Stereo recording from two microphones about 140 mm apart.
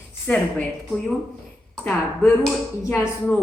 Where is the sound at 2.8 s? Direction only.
15° left (ahead or behind).